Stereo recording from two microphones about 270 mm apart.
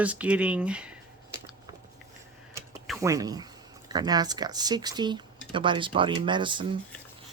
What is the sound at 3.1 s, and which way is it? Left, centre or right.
Speech, centre.